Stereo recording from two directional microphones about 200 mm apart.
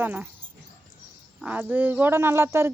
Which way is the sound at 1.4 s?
5° right (ahead or behind).